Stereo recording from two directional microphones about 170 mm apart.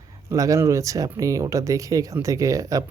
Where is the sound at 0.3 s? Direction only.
20° right (ahead or behind).